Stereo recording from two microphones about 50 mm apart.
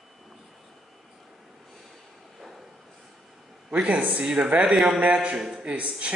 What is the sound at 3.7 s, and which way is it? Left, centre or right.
Speech, right.